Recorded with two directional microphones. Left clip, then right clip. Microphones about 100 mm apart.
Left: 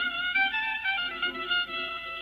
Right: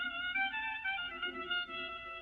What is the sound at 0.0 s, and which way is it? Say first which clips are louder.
Music: left 9 dB; 25° right (ahead or behind).